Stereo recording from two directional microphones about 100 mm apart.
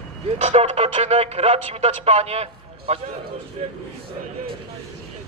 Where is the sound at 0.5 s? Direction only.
90° right.